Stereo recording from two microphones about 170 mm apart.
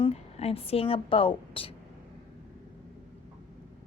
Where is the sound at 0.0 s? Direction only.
35° left (ahead or behind).